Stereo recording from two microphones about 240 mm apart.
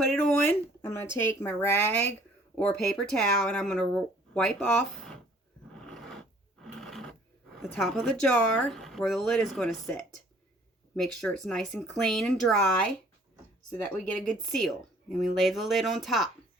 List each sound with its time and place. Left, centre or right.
0.0 s a sound: centre
1.4 s speech: centre
5.8 s a sound: centre
6.6 s sewing machine: centre
7.6 s speech: centre
13.7 s speech: centre